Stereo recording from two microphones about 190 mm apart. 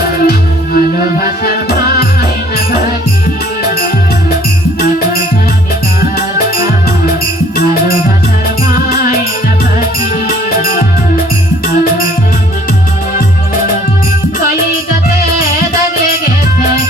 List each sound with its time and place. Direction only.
0.3 s music: 50° left (ahead or behind)
6.1 s music: 50° left (ahead or behind)
8.7 s music: 50° left (ahead or behind)
10.2 s music: 50° left (ahead or behind)